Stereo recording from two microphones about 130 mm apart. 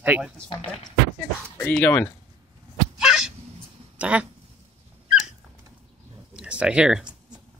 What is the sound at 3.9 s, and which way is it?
Speech, 10° right (ahead or behind).